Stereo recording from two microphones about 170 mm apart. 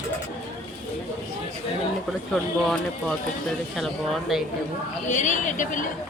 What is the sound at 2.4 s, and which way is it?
Speech, 5° left (ahead or behind).